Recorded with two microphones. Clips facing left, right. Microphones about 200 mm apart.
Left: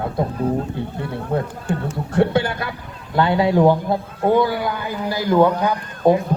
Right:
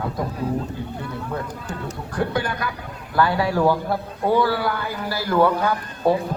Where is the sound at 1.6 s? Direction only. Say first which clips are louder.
Left 7 dB; 40° right (ahead or behind).